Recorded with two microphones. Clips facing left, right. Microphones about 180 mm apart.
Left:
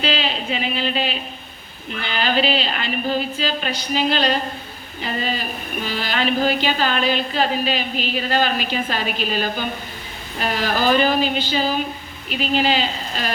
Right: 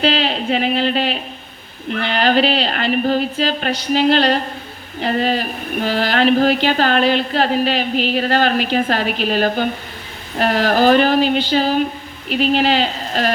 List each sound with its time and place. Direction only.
0.0 s a woman's voice: 55° right (ahead or behind)